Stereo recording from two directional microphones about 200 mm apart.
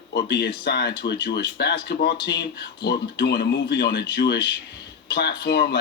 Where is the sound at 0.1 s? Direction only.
50° left (ahead or behind).